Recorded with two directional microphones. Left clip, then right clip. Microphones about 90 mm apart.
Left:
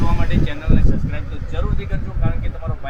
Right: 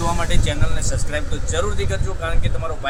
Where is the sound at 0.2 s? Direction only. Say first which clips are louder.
Right 2 dB; 40° right (ahead or behind).